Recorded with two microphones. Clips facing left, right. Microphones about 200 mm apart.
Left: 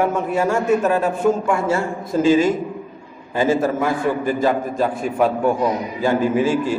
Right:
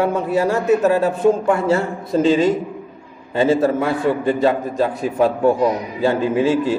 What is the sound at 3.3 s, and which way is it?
Speech, 30° right (ahead or behind).